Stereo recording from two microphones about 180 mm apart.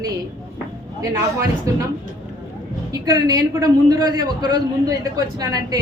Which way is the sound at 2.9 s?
20° right (ahead or behind).